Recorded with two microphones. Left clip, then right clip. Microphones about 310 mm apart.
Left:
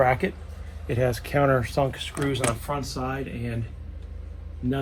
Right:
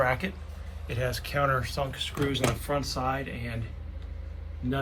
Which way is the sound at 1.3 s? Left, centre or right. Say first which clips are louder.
Left 4 dB; centre.